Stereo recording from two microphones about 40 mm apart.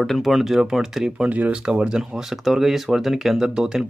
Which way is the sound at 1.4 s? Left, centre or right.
Right.